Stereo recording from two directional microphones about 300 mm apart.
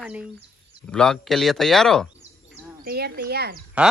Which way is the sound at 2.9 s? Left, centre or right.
Right.